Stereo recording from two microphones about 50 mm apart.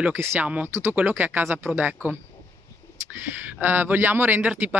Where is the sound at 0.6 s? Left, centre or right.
Right.